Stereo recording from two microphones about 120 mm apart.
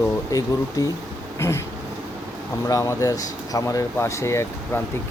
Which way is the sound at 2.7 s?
25° left (ahead or behind).